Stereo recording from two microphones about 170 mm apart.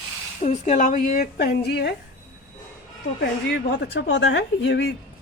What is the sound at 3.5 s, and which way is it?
A woman's voice, 90° left.